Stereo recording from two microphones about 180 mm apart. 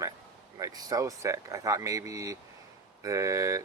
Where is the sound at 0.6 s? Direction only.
20° right (ahead or behind).